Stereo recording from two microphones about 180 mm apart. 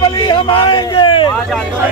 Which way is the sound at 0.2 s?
25° left (ahead or behind).